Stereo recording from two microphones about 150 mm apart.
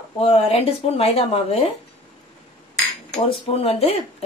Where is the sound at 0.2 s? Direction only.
40° left (ahead or behind).